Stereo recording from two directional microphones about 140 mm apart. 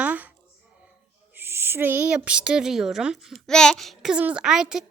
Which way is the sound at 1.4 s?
15° right (ahead or behind).